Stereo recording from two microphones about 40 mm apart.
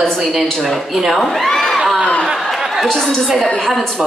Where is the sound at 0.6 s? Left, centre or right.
Centre.